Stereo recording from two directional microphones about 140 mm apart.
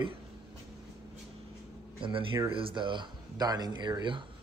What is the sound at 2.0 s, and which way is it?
Speech, 40° right (ahead or behind).